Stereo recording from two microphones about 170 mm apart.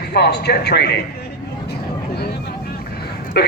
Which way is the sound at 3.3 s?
75° left (ahead or behind).